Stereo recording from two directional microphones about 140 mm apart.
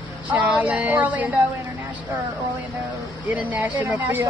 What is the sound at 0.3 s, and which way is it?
Speech, 10° right (ahead or behind).